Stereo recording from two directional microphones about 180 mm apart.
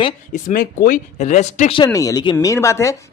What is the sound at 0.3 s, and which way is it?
Speech, 50° left (ahead or behind).